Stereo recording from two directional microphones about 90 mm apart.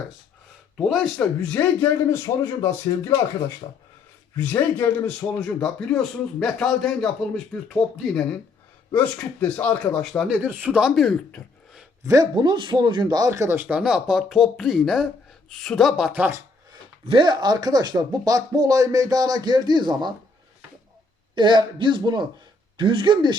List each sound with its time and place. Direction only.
0.8 s speech: centre (ahead or behind)
1.2 s a man's voice: 15° left (ahead or behind)
2.1 s speech: 35° left (ahead or behind)
4.4 s a man's voice: 20° left (ahead or behind)
10.0 s speech: centre (ahead or behind)
10.2 s speech: 15° right (ahead or behind)
10.8 s speech: 5° right (ahead or behind)
12.0 s speech: 45° right (ahead or behind)
13.7 s speech: 10° right (ahead or behind)
17.1 s speech: 60° right (ahead or behind)
21.3 s a man's voice: 60° right (ahead or behind)